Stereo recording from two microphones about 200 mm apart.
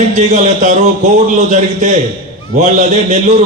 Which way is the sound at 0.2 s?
35° right (ahead or behind).